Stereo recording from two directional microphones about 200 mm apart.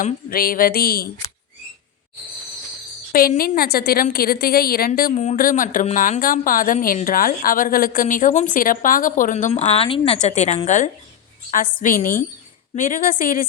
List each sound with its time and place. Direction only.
0.0 s a woman's voice: 45° left (ahead or behind)
3.1 s a woman's voice: 45° left (ahead or behind)